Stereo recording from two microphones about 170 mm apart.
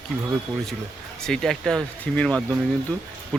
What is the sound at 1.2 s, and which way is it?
Speech, 5° left (ahead or behind).